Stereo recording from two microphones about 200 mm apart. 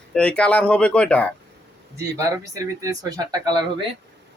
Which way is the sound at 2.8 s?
15° right (ahead or behind).